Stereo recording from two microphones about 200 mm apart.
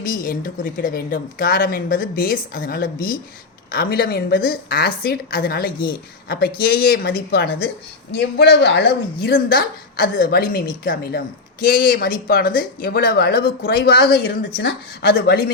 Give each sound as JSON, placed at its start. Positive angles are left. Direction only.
{"t": 0.0, "sound": "a woman's voice", "side_deg": 45}